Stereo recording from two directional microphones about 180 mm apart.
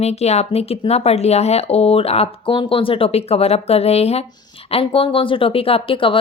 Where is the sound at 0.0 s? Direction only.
35° left (ahead or behind).